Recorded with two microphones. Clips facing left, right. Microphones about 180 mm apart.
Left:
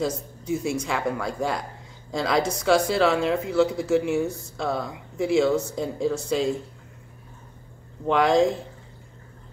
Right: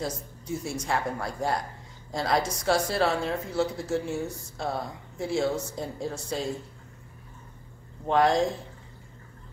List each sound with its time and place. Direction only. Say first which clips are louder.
0.7 s speech: left 2 dB; 90° left
8.1 s speech: left 3 dB; 90° left